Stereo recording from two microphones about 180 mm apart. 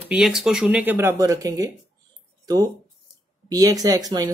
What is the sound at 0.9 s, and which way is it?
A man's voice, 20° right (ahead or behind).